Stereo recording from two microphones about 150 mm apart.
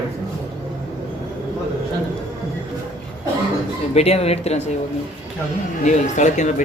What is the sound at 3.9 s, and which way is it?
Speech, 45° left (ahead or behind).